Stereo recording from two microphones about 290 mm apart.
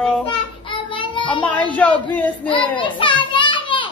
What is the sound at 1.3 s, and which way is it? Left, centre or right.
Speech, centre.